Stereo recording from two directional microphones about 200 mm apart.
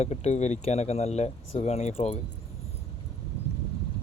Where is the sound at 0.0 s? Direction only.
35° left (ahead or behind).